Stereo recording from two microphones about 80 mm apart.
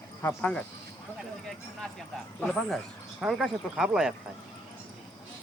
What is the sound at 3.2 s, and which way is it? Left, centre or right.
Speech, centre.